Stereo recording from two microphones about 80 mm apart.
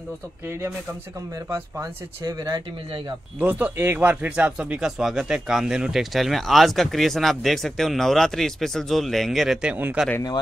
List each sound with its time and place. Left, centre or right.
1.5 s speech: right
3.3 s speech: right